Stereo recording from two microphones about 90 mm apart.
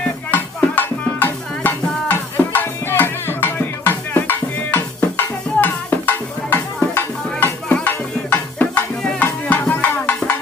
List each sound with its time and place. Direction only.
0.3 s music: 20° left (ahead or behind)